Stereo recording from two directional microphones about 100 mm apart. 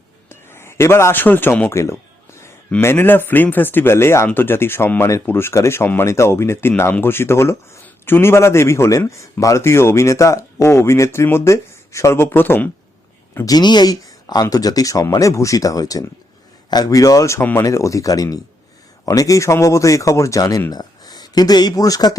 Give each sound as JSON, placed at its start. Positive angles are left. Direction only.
{"t": 0.3, "sound": "a man's voice", "side_deg": 25}
{"t": 2.8, "sound": "a man's voice", "side_deg": 20}
{"t": 13.4, "sound": "speech", "side_deg": 45}